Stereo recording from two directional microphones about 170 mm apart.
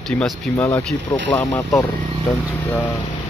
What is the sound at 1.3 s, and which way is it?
Speech, 5° left (ahead or behind).